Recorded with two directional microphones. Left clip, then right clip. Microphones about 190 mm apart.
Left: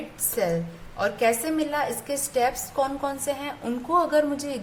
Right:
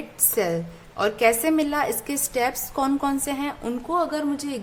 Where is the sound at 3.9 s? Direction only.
25° right (ahead or behind).